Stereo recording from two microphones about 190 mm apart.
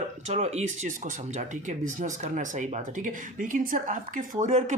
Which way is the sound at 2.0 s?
40° right (ahead or behind).